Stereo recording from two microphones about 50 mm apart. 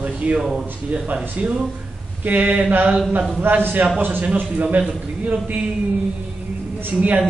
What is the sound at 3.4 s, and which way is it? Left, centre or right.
Speech, right.